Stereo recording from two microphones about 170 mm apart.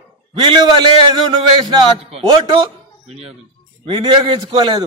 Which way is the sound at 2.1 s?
25° right (ahead or behind).